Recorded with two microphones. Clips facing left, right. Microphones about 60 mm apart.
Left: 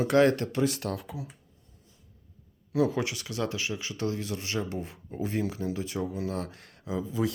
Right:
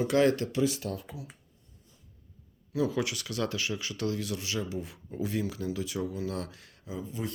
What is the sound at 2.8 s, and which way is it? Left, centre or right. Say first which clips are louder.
Speech: left 1 dB; left.